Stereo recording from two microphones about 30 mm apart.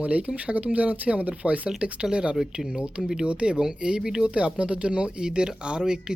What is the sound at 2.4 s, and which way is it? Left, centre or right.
Speech, centre.